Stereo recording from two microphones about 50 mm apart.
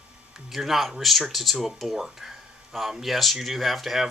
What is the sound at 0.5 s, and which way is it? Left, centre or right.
Speech, centre.